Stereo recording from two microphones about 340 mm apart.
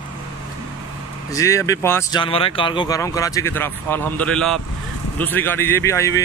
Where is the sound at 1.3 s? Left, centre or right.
Centre.